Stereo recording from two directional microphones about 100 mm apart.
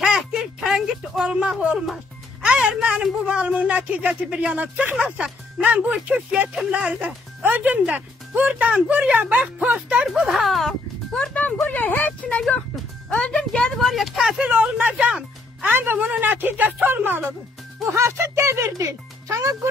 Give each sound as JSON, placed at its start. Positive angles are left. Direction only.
{"t": 0.0, "sound": "a sound", "side_deg": -5}
{"t": 2.4, "sound": "speech", "side_deg": -5}
{"t": 11.6, "sound": "speech", "side_deg": 15}
{"t": 14.5, "sound": "speech", "side_deg": -15}